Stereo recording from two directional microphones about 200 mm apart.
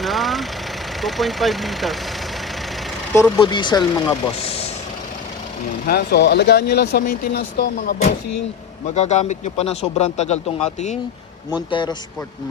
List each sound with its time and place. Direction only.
0.0 s vehicle: centre (ahead or behind)
1.0 s speech: centre (ahead or behind)
3.4 s speech: 25° left (ahead or behind)
5.8 s speech: 50° left (ahead or behind); by 10.3 s 35° left (ahead or behind)
11.7 s speech: 25° left (ahead or behind)